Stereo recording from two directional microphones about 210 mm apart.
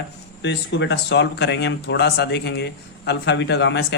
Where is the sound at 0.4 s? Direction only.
55° left (ahead or behind).